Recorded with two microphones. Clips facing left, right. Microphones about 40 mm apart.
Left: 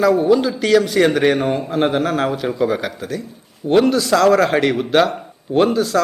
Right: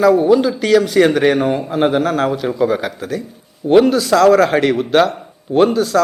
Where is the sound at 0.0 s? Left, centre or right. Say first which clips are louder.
Right 3 dB; centre.